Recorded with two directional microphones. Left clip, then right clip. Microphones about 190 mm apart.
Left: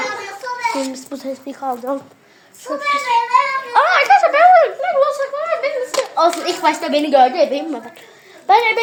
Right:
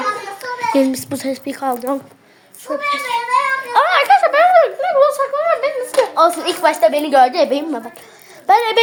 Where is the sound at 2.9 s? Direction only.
Centre (ahead or behind).